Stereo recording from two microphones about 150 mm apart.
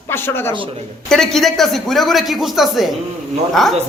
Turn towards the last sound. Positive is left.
turn(degrees=0)  # may be behind; listen again after turning